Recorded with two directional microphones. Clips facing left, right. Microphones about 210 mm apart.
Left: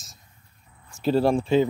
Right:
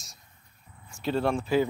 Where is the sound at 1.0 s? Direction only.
35° left (ahead or behind).